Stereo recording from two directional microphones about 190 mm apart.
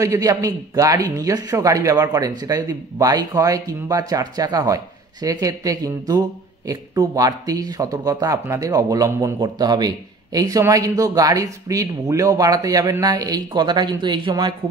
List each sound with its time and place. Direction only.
0.0 s speech: 15° right (ahead or behind)